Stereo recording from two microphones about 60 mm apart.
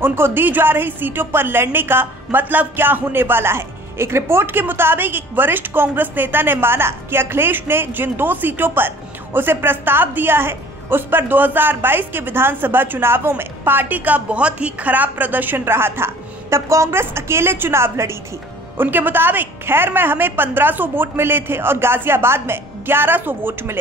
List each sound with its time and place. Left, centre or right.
0.0 s a woman's voice: right
18.8 s a woman's voice: right